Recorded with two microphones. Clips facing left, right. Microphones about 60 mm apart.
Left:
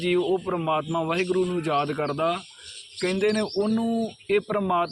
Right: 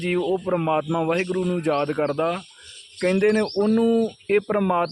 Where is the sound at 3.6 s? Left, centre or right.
Right.